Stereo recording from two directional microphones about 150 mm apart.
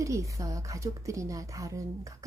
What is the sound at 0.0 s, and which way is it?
Speech, 20° right (ahead or behind).